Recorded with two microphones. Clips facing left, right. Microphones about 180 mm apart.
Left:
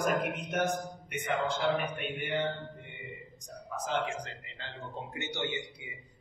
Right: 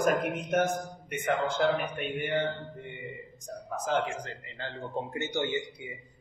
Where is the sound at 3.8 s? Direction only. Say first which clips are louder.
Right 4 dB; 45° right (ahead or behind).